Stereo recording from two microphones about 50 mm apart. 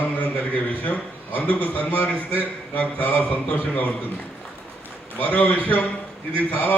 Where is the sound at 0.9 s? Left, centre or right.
Left.